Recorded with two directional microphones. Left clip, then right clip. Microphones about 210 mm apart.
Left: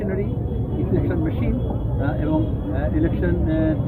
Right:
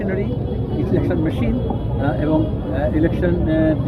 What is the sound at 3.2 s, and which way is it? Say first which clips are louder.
Speech: right 4 dB; 40° right (ahead or behind).